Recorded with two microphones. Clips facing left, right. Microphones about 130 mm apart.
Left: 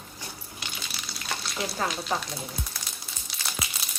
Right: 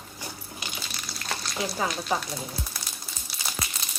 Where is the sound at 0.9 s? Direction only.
5° left (ahead or behind).